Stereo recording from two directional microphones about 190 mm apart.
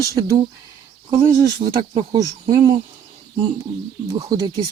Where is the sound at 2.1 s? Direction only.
20° right (ahead or behind).